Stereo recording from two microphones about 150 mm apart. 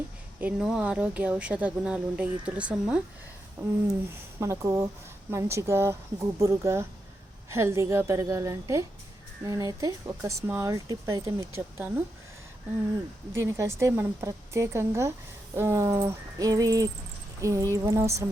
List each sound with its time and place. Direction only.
0.3 s speech: 5° right (ahead or behind)
13.3 s speech: 20° right (ahead or behind)